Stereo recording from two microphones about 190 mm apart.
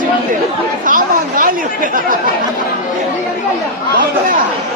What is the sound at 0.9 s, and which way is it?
Chatter, 45° right (ahead or behind).